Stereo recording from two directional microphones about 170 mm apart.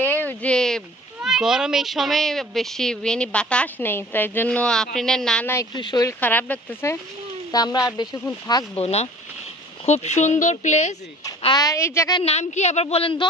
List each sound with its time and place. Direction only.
0.0 s speech: 10° left (ahead or behind)
5.8 s a woman's voice: 25° left (ahead or behind)
6.2 s speech: 10° left (ahead or behind)
7.5 s a woman's voice: 25° left (ahead or behind)
8.7 s speech: 40° left (ahead or behind)
11.4 s a woman's voice: 20° left (ahead or behind)
12.2 s speech: 40° left (ahead or behind)